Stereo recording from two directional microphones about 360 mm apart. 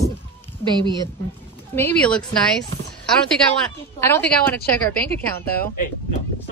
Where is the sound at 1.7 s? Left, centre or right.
Centre.